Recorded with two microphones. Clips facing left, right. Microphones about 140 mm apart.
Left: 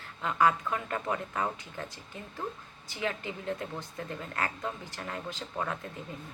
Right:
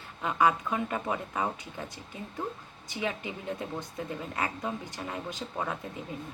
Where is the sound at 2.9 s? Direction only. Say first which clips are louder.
Right 1 dB; 20° right (ahead or behind).